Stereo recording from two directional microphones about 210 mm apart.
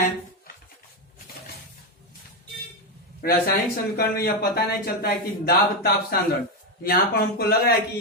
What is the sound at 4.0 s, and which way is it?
Speech, 45° left (ahead or behind).